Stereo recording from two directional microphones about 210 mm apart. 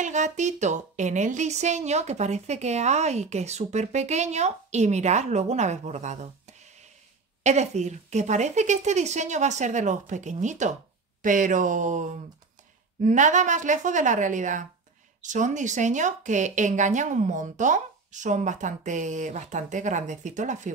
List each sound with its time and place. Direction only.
0.0 s speech: 35° right (ahead or behind)